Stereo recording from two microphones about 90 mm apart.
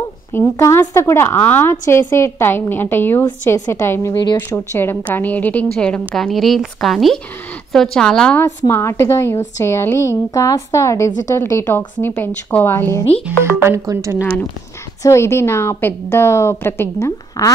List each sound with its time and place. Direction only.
0.3 s a woman's voice: 25° left (ahead or behind)
3.4 s a woman's voice: 35° left (ahead or behind); by 8.4 s 5° left (ahead or behind)
8.5 s a woman's voice: 30° left (ahead or behind)
13.4 s speech: 30° right (ahead or behind)
15.0 s a woman's voice: 30° left (ahead or behind)